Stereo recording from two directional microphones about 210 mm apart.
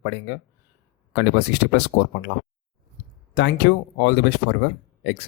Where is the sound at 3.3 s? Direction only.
55° left (ahead or behind).